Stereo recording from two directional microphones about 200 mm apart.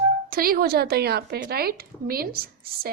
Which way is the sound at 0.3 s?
50° right (ahead or behind).